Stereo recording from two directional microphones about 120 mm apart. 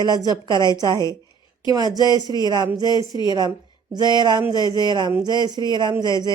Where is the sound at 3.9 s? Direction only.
35° right (ahead or behind).